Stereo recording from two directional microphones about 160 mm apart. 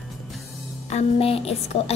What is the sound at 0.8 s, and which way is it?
Speech, 40° left (ahead or behind).